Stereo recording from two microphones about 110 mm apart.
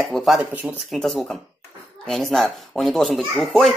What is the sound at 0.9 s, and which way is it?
A child's voice, centre (ahead or behind).